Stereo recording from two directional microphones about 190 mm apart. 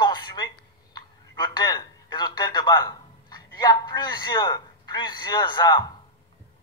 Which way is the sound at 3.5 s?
20° left (ahead or behind).